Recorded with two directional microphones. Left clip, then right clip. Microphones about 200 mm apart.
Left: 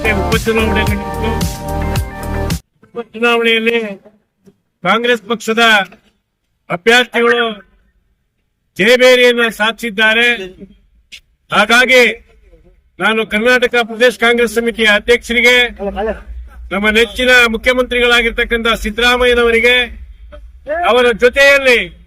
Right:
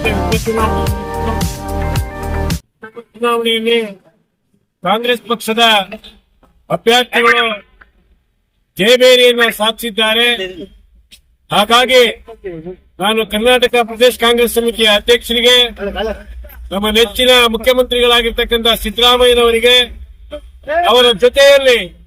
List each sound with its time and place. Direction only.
0.0 s music: centre (ahead or behind)
3.2 s speech: 5° right (ahead or behind)
7.2 s a man's voice: 15° left (ahead or behind)
8.8 s speech: 5° right (ahead or behind)
11.5 s speech: 5° right (ahead or behind)
16.7 s speech: 5° right (ahead or behind)